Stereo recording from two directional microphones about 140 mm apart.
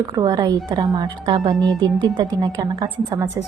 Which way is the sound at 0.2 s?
30° right (ahead or behind).